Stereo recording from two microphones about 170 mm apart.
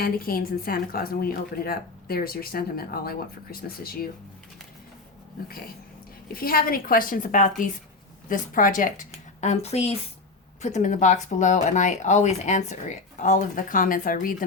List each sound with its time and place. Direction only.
0.0 s a woman's voice: 60° left (ahead or behind)
6.3 s a woman's voice: 60° left (ahead or behind)